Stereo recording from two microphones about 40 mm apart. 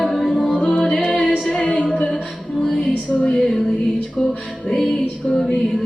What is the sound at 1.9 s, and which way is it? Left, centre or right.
Music, centre.